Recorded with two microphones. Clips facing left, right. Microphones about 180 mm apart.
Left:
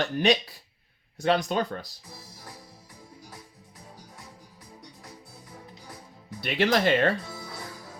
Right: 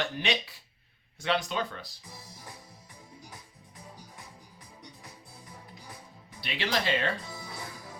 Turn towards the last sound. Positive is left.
turn(degrees=50)  # may be behind; listen again after turning